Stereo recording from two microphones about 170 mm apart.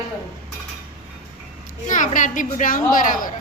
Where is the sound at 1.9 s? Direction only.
50° left (ahead or behind).